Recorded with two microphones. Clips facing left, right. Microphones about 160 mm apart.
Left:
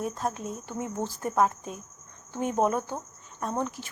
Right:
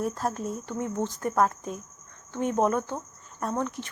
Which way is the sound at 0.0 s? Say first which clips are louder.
Right 2 dB; centre (ahead or behind).